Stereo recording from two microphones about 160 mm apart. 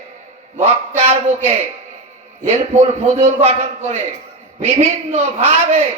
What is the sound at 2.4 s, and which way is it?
A man's voice, 45° right (ahead or behind).